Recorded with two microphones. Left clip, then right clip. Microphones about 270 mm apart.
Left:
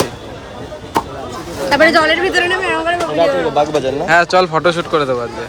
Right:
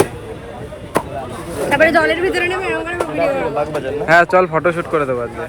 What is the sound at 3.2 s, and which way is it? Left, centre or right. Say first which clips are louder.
Speech: left 4 dB; left.